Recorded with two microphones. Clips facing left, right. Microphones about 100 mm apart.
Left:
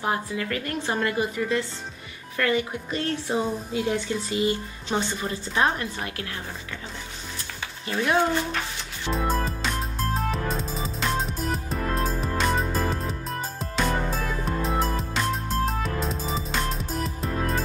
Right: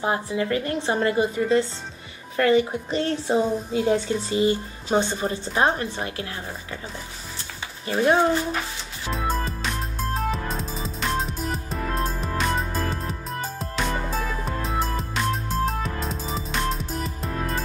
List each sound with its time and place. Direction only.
0.0 s a woman's voice: 25° right (ahead or behind)
7.8 s speech: 30° right (ahead or behind)
9.0 s music: centre (ahead or behind)